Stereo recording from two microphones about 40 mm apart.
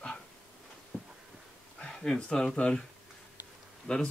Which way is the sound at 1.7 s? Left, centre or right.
Centre.